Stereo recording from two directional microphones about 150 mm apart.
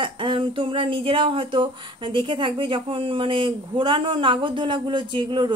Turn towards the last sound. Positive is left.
turn(degrees=-30)  # may be behind; listen again after turning